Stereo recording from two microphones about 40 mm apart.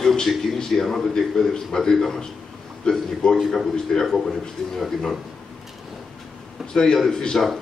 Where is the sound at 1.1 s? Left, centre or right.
Centre.